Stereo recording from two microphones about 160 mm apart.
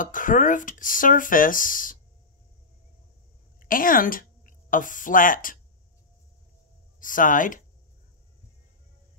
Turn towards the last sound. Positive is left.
turn(degrees=55)  # may be behind; listen again after turning